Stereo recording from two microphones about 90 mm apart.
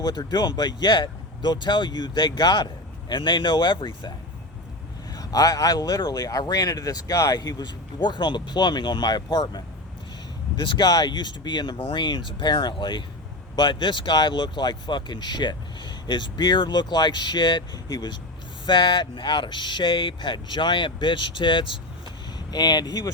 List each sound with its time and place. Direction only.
0.0 s speech: 50° left (ahead or behind)
5.1 s speech: 40° left (ahead or behind)
10.6 s speech: 60° left (ahead or behind)
11.8 s speech: 75° left (ahead or behind)
22.4 s speech: 50° left (ahead or behind)